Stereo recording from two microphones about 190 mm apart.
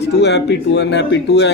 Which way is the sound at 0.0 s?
60° left (ahead or behind).